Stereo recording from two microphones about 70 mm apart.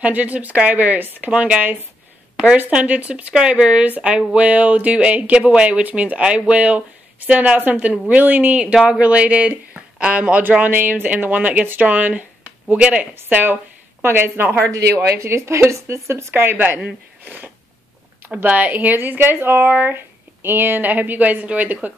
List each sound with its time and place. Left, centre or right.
0.0 s speech: centre
8.5 s speech: centre; by 14.7 s right
14.7 s speech: right
17.2 s a sound: right
18.3 s speech: right